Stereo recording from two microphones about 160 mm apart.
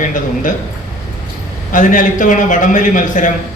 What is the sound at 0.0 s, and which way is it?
Speech, 55° left (ahead or behind).